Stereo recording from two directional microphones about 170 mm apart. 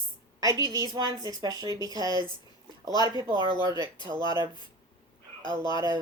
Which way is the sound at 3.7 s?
25° left (ahead or behind).